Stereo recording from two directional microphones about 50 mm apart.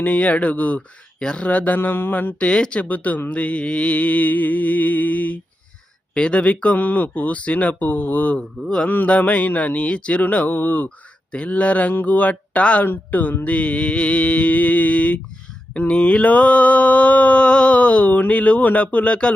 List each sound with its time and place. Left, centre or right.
0.0 s mantra: left
0.8 s speech: centre
1.5 s music: left
2.4 s mantra: left
3.2 s music: left
6.1 s mantra: left
6.7 s music: left
9.0 s mantra: left
10.2 s music: left
10.8 s speech: left
12.0 s mantra: left
12.8 s music: left
13.4 s mantra: left